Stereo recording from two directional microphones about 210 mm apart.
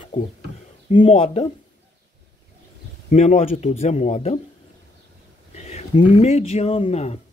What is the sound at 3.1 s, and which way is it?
Speech, 35° left (ahead or behind).